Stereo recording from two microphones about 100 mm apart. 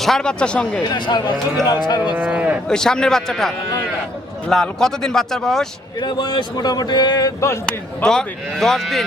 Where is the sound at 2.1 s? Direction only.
10° right (ahead or behind).